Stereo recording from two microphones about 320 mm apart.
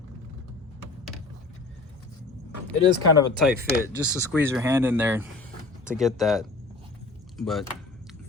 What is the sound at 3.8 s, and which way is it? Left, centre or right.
Speech, centre.